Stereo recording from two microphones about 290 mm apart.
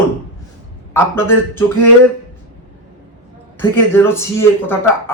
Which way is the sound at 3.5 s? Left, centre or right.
Centre.